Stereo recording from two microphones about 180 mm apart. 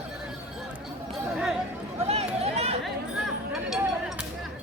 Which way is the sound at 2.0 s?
35° right (ahead or behind).